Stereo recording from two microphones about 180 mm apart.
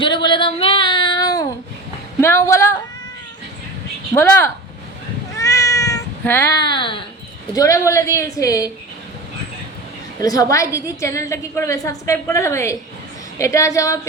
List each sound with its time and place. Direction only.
0.0 s a sound: 25° left (ahead or behind)
2.2 s speech: 15° left (ahead or behind)
4.1 s a woman's voice: 15° left (ahead or behind)
5.4 s cat: 15° left (ahead or behind)
7.5 s a woman's voice: 20° left (ahead or behind)
10.2 s a woman's voice: 20° left (ahead or behind)